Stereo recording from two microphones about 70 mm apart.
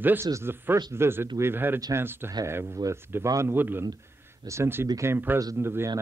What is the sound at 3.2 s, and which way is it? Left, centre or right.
Speech, right.